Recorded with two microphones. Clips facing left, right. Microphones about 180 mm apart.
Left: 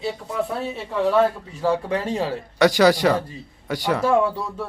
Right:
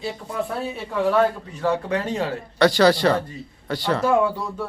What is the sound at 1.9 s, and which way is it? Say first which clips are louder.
Speech: even; 30° left (ahead or behind).